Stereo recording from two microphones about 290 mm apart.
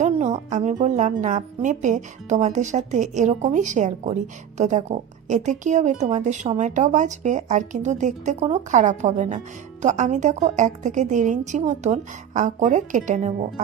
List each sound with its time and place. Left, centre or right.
0.0 s speech: right